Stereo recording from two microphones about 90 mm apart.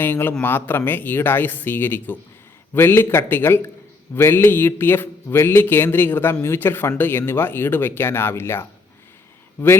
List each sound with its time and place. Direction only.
0.0 s speech: 20° left (ahead or behind)